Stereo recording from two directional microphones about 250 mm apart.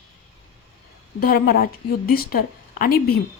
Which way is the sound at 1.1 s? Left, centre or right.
Left.